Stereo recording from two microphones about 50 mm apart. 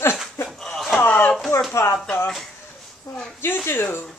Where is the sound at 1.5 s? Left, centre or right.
Left.